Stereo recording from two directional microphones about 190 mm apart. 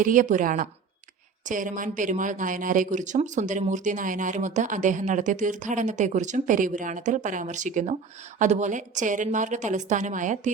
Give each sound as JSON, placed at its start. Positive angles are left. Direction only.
{"t": 0.0, "sound": "a woman's voice", "side_deg": -45}